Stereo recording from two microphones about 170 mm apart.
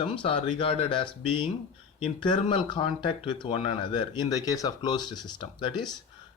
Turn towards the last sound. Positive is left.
turn(degrees=30)  # may be behind; listen again after turning